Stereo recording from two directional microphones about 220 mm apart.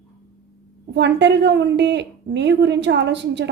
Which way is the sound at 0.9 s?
50° right (ahead or behind).